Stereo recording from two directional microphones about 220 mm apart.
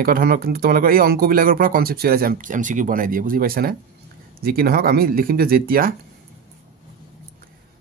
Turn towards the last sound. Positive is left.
turn(degrees=-40)  # may be behind; listen again after turning